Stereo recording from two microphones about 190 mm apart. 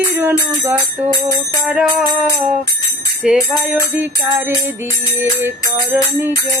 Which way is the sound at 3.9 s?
15° right (ahead or behind).